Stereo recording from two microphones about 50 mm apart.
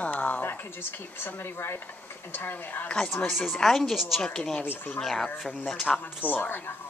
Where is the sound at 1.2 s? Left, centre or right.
Left.